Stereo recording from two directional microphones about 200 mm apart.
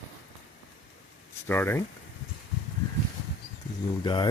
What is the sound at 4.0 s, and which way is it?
Speech, 25° left (ahead or behind).